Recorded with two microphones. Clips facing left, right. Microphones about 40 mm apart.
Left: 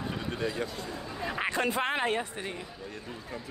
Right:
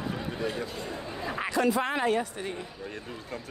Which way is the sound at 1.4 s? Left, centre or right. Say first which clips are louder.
Right 3 dB; left.